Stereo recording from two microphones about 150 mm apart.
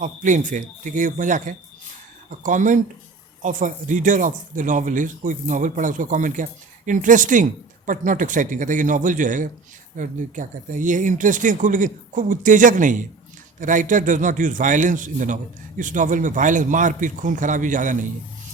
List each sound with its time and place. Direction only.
0.0 s speech: 60° right (ahead or behind)